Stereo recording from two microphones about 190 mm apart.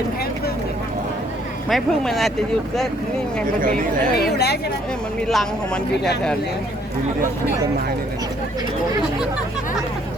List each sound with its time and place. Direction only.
1.7 s speech: centre (ahead or behind)
4.1 s speech: 55° left (ahead or behind)
5.3 s speech: centre (ahead or behind)